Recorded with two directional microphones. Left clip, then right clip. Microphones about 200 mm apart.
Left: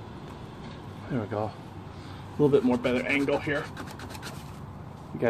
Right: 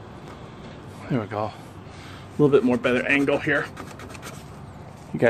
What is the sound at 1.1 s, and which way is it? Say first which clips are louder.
Speech: right 4 dB; 50° right (ahead or behind).